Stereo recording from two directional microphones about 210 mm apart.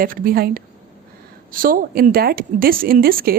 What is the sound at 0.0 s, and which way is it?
Speech, 45° right (ahead or behind).